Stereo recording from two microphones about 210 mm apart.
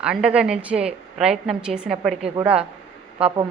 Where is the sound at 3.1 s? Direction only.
25° right (ahead or behind).